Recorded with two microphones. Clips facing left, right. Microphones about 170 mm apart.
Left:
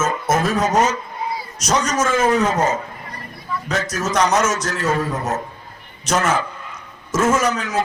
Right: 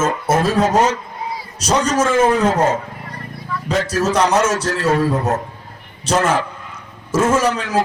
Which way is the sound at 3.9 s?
30° right (ahead or behind).